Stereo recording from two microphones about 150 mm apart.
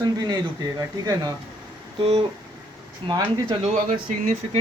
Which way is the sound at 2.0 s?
40° right (ahead or behind).